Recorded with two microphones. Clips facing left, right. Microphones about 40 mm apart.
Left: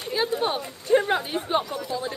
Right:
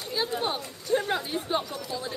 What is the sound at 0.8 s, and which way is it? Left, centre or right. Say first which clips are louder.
Speech: left 6 dB; left.